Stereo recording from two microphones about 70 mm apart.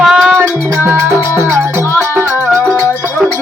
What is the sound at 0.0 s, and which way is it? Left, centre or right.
Music, centre.